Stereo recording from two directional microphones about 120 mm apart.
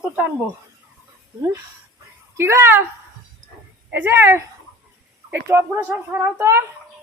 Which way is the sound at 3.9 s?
15° right (ahead or behind).